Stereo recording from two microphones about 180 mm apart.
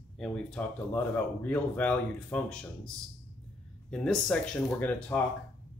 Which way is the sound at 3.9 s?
5° left (ahead or behind).